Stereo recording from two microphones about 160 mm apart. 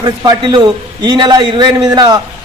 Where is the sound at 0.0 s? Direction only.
25° right (ahead or behind).